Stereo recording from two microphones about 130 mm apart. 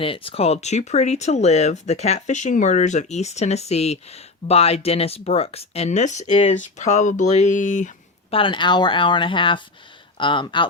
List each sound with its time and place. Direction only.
0.0 s speech: 45° left (ahead or behind)
6.6 s speech: 65° left (ahead or behind)
8.3 s speech: 40° left (ahead or behind)